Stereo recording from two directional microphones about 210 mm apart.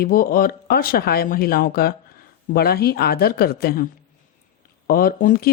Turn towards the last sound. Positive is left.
turn(degrees=40)  # may be behind; listen again after turning